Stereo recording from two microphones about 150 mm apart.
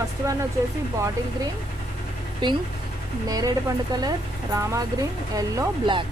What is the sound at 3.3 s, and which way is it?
Speech, 25° right (ahead or behind).